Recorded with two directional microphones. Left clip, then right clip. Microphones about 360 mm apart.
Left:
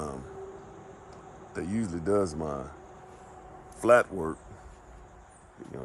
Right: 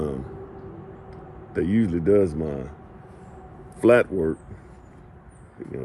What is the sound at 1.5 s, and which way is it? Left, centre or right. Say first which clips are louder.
Speech: right 10 dB; centre.